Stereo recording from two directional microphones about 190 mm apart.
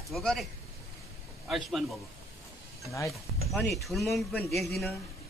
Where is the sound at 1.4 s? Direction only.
Centre (ahead or behind).